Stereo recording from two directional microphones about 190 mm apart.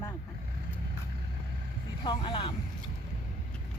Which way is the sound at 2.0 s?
25° left (ahead or behind).